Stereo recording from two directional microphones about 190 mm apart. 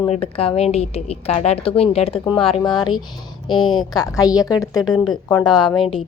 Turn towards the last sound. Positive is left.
turn(degrees=20)  # may be behind; listen again after turning